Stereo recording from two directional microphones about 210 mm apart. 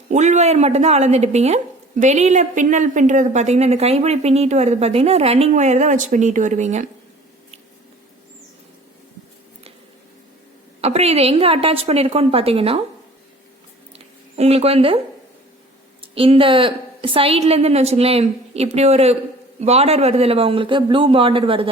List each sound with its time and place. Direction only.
0.1 s speech: 35° right (ahead or behind)
10.8 s a woman's voice: 30° right (ahead or behind)
13.9 s a sound: 30° right (ahead or behind)
16.1 s a woman's voice: 25° right (ahead or behind)